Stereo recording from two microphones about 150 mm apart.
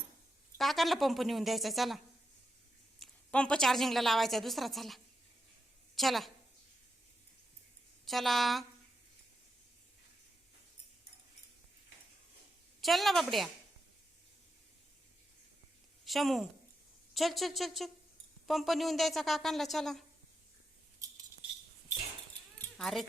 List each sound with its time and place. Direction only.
0.6 s a woman's voice: centre (ahead or behind)
3.0 s a woman's voice: 5° left (ahead or behind)
6.0 s a woman's voice: centre (ahead or behind)
8.0 s a woman's voice: centre (ahead or behind)
12.8 s a woman's voice: centre (ahead or behind)
16.0 s a woman's voice: centre (ahead or behind)
21.0 s cutlery: 20° right (ahead or behind)
22.8 s a woman's voice: centre (ahead or behind)